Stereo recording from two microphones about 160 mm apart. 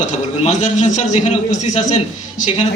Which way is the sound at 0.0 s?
45° left (ahead or behind).